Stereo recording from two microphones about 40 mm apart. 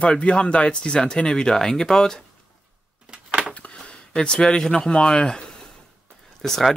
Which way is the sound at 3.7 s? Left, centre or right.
Left.